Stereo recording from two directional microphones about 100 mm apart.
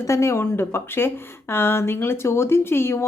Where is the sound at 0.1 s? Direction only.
25° left (ahead or behind).